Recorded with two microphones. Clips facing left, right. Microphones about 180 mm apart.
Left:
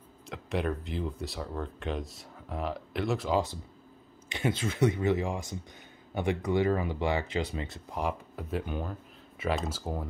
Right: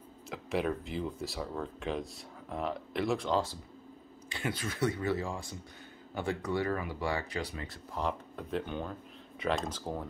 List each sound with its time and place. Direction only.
0.3 s speech: centre (ahead or behind)
4.3 s speech: 20° left (ahead or behind)
8.1 s speech: 5° left (ahead or behind)